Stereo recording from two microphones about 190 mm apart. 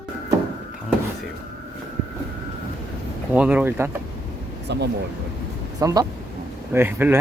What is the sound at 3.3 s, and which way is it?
Speech, 5° right (ahead or behind).